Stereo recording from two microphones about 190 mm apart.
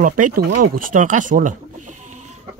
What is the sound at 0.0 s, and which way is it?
Speech, 45° right (ahead or behind).